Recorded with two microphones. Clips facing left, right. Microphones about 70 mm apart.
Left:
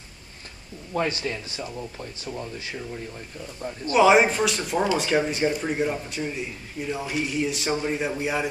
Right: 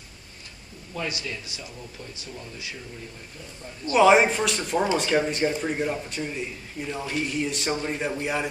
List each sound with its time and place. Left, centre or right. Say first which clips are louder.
0.9 s speech: left 6 dB; left
3.9 s speech: even; centre